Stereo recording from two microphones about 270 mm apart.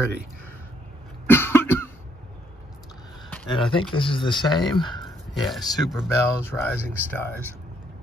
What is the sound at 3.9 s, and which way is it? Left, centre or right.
Speech, centre.